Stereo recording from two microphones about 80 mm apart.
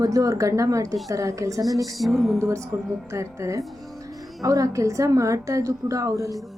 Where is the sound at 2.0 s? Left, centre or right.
Centre.